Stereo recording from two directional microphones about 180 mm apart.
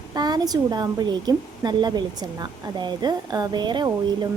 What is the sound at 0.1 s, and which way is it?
Speech, 20° right (ahead or behind).